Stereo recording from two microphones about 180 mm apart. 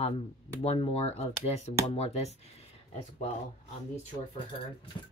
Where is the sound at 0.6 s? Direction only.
35° left (ahead or behind).